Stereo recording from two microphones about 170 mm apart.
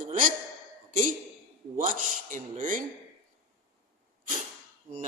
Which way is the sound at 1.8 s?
50° right (ahead or behind).